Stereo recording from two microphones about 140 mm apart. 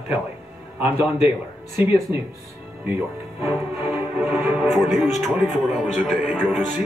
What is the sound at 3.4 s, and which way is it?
Music, 15° right (ahead or behind).